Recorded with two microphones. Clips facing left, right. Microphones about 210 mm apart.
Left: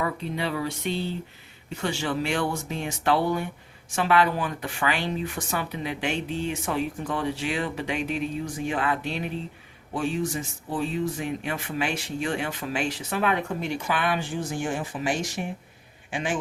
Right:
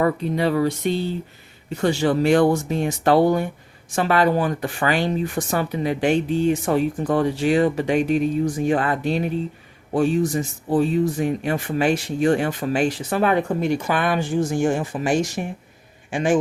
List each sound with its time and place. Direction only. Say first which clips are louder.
0.0 s a man's voice: right 8 dB; 45° right (ahead or behind)